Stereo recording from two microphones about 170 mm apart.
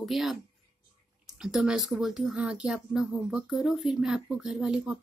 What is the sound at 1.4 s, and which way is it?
Speech, 5° right (ahead or behind).